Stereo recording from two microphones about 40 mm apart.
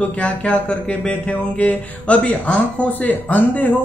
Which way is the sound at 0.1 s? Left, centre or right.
Left.